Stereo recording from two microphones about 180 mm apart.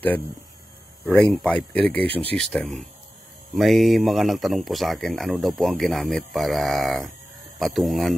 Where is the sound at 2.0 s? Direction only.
30° right (ahead or behind).